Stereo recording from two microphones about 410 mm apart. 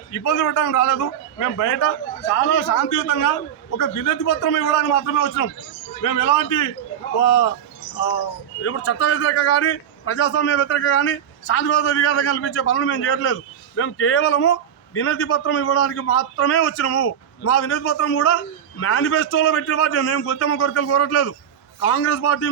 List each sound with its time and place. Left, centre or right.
0.1 s a man's voice: left
8.6 s a man's voice: left